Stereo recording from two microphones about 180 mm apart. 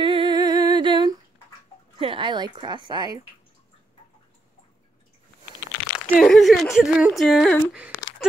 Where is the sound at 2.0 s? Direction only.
30° right (ahead or behind).